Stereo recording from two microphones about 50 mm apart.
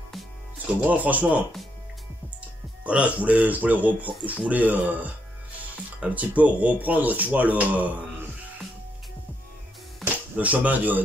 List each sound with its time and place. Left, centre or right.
0.7 s speech: right
2.8 s speech: right
10.3 s speech: right